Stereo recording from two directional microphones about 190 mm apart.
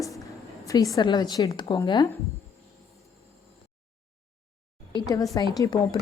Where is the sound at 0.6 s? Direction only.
15° left (ahead or behind).